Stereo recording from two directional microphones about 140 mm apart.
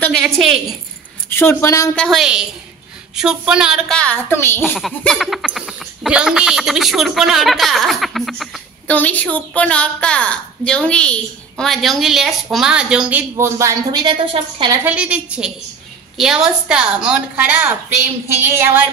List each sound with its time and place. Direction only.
0.2 s a sound: centre (ahead or behind)
1.3 s speech: 15° left (ahead or behind)
2.0 s a sound: centre (ahead or behind)
4.0 s a woman's voice: 15° left (ahead or behind)
4.9 s a sound: 5° left (ahead or behind)
8.9 s a woman's voice: 10° left (ahead or behind); by 13.2 s 5° right (ahead or behind)
13.4 s speech: 20° right (ahead or behind)
14.0 s a woman's voice: 40° right (ahead or behind)
14.9 s a woman's voice: 10° right (ahead or behind)